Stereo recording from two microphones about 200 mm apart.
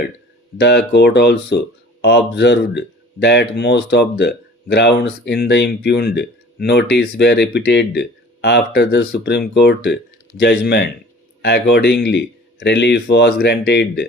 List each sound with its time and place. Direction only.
0.6 s speech: 55° left (ahead or behind)